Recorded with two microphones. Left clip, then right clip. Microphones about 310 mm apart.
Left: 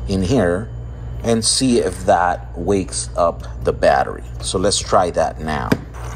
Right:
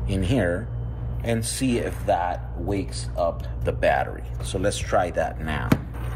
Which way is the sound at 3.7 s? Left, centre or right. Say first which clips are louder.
Left 7 dB; centre.